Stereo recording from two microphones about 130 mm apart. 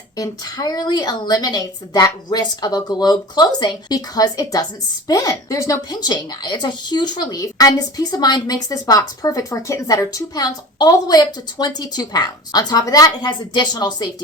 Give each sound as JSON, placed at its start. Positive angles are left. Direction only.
{"t": 0.2, "sound": "a woman's voice", "side_deg": 30}